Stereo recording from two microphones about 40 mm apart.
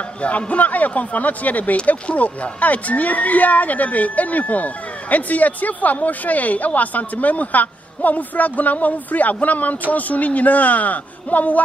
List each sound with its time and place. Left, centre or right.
0.2 s speech: left